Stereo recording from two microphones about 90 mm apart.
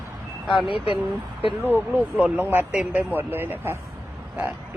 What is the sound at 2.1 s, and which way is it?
Speech, 10° right (ahead or behind).